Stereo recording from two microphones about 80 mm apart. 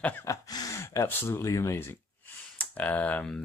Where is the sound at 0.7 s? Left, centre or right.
Left.